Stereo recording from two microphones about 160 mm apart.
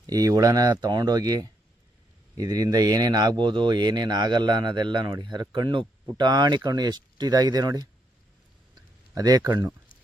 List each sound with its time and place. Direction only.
0.1 s speech: 25° right (ahead or behind)
9.1 s speech: 25° right (ahead or behind)